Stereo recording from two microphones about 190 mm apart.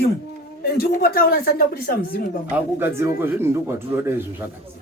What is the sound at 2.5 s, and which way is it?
Speech, 10° right (ahead or behind).